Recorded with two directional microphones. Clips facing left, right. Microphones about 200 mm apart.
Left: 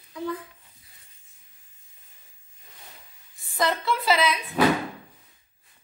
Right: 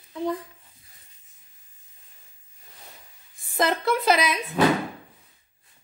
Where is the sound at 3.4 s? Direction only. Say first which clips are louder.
Right 2 dB; 50° right (ahead or behind).